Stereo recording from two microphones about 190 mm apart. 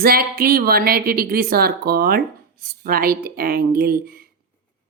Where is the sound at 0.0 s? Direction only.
50° right (ahead or behind).